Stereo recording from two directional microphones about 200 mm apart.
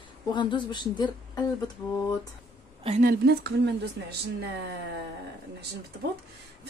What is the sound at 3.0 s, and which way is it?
Speech, 55° right (ahead or behind).